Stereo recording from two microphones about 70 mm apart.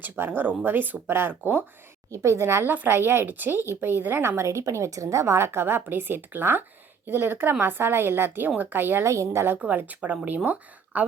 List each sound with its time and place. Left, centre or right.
0.0 s speech: right
2.0 s a woman's voice: right
9.0 s a woman's voice: right
9.6 s speech: right